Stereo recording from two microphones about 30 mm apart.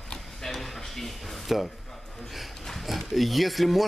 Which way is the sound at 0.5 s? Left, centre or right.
Centre.